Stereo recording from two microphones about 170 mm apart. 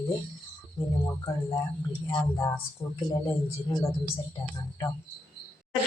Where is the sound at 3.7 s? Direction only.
20° left (ahead or behind).